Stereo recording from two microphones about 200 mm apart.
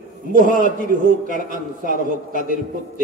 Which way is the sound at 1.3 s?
40° left (ahead or behind).